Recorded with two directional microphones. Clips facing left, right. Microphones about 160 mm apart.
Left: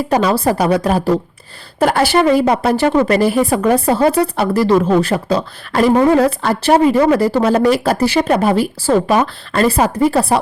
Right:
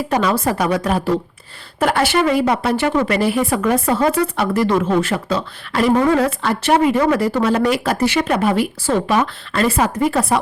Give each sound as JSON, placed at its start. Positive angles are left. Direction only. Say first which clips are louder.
{"t": 0.1, "sound": "a woman's voice", "louder": "left 4 dB", "side_deg": 35}